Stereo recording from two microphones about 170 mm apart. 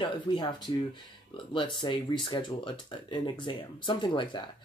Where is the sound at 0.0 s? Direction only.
30° left (ahead or behind).